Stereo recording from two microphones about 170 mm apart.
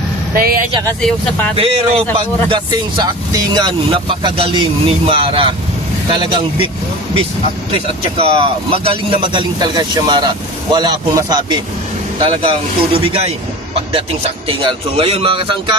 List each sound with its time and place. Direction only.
0.3 s speech: 60° right (ahead or behind)
1.5 s speech: 35° right (ahead or behind)
7.7 s speech: 30° right (ahead or behind)